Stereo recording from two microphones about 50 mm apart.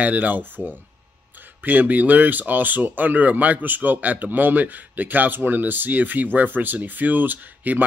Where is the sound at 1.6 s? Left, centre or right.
Right.